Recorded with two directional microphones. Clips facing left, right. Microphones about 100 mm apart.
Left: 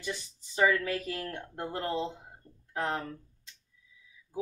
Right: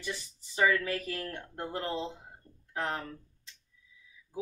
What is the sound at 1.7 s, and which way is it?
Speech, 15° right (ahead or behind).